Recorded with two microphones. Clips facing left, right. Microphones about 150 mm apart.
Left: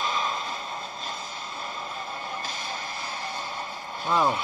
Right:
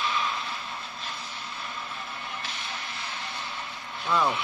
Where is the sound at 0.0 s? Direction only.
40° left (ahead or behind).